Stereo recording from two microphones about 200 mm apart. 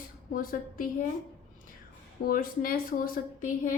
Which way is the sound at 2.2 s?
45° left (ahead or behind).